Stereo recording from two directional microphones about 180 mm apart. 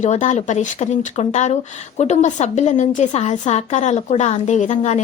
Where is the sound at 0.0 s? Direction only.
40° left (ahead or behind).